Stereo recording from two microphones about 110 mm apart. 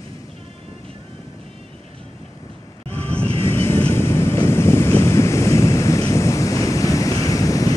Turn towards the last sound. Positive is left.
turn(degrees=30)  # may be behind; listen again after turning